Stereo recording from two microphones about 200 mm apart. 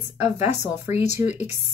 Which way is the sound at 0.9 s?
35° left (ahead or behind).